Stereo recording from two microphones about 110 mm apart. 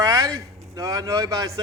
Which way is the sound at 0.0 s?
30° right (ahead or behind).